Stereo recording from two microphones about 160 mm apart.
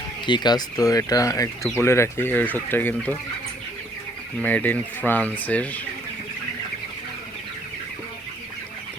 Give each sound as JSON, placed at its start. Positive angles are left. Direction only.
{"t": 0.3, "sound": "speech", "side_deg": 25}
{"t": 4.4, "sound": "speech", "side_deg": 10}